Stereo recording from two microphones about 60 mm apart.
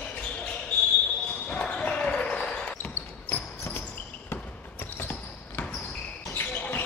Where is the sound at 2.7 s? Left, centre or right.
Left.